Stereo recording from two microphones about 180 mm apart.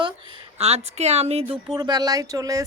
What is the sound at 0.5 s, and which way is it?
A woman's voice, 35° right (ahead or behind).